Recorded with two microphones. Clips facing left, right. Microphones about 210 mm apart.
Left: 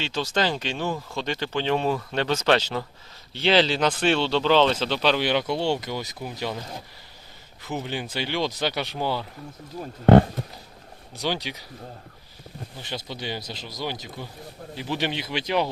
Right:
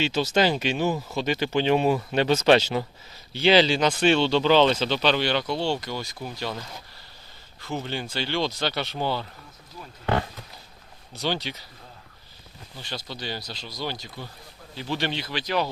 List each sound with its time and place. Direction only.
0.0 s speech: 10° right (ahead or behind)
3.3 s speech: centre (ahead or behind)
5.2 s speech: 15° left (ahead or behind)
7.7 s speech: 10° left (ahead or behind)
9.8 s speech: 40° left (ahead or behind)
11.1 s speech: 15° left (ahead or behind)
12.9 s speech: 15° left (ahead or behind)